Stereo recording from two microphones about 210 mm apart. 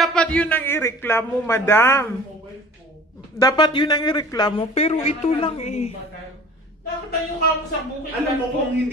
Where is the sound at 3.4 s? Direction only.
20° left (ahead or behind).